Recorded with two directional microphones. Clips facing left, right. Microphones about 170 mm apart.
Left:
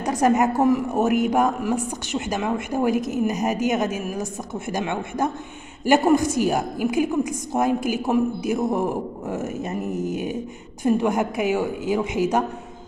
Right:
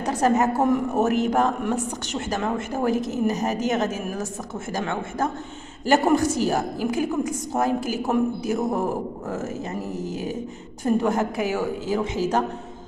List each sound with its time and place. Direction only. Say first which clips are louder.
0.0 s a woman's voice: left 1 dB; 15° left (ahead or behind)